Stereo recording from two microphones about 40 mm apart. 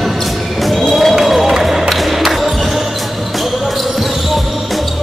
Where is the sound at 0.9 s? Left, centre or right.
Centre.